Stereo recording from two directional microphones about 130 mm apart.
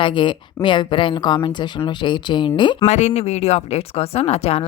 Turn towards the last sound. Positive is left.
turn(degrees=50)  # may be behind; listen again after turning